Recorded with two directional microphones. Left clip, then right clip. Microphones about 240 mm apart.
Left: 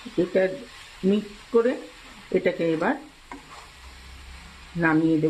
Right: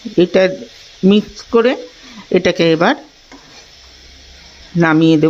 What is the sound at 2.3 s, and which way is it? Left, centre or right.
Speech, right.